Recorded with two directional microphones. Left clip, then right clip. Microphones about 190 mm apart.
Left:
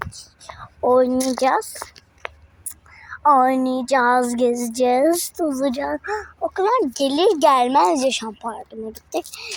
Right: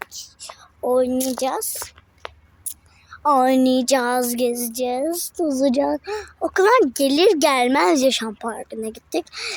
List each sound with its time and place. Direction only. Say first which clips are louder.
0.1 s a sound: right 2 dB; 5° right (ahead or behind)
0.8 s speech: left 3 dB; centre (ahead or behind)
1.7 s a sound: even; 50° left (ahead or behind)
3.2 s a woman's voice: left 1 dB; 20° right (ahead or behind)
4.0 s speech: left 3 dB; 10° right (ahead or behind); by 5.3 s 15° left (ahead or behind)
5.5 s speech: right 7 dB; 40° right (ahead or behind)
6.0 s speech: left 1 dB; 25° right (ahead or behind)
6.8 s a woman's voice: right 1 dB; 20° right (ahead or behind)